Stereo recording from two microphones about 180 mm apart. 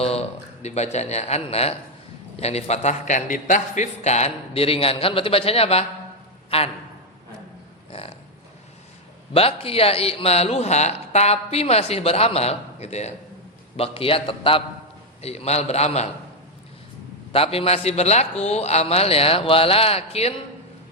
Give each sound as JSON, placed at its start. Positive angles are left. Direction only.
{"t": 0.0, "sound": "speech", "side_deg": 35}
{"t": 9.3, "sound": "speech", "side_deg": 30}
{"t": 17.3, "sound": "speech", "side_deg": 30}